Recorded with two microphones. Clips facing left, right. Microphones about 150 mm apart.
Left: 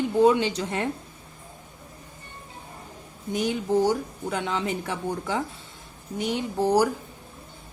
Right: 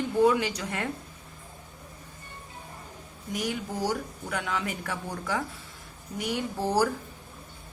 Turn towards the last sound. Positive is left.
turn(degrees=15)  # may be behind; listen again after turning